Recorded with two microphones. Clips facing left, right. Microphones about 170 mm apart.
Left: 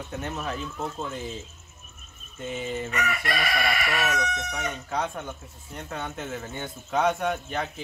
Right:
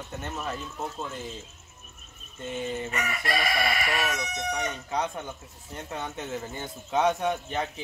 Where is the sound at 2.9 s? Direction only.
35° right (ahead or behind).